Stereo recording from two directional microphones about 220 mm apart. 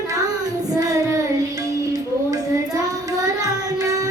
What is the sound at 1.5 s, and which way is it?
Music, 15° right (ahead or behind).